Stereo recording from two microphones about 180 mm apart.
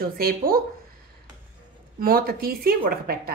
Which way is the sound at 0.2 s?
55° right (ahead or behind).